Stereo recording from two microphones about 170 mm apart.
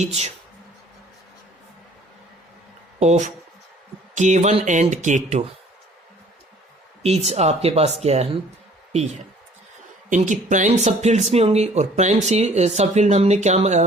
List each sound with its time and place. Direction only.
0.0 s speech: 40° right (ahead or behind)
3.0 s speech: 40° right (ahead or behind)
7.0 s a man's voice: 40° right (ahead or behind)